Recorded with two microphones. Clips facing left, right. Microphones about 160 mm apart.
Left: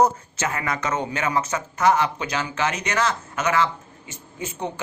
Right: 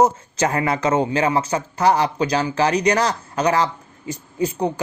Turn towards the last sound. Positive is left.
turn(degrees=-35)  # may be behind; listen again after turning